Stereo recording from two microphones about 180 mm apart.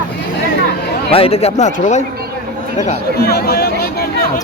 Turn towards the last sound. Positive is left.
turn(degrees=60)  # may be behind; listen again after turning